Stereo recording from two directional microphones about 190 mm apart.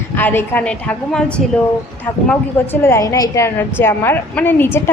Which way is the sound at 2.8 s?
15° left (ahead or behind).